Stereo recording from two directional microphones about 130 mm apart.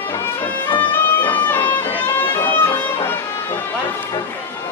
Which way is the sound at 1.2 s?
15° left (ahead or behind).